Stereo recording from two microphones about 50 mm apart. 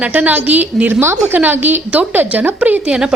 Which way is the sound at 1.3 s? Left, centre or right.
Right.